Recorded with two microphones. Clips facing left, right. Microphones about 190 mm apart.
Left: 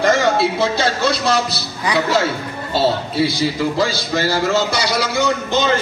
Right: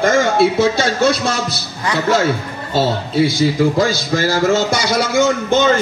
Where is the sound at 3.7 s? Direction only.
50° right (ahead or behind).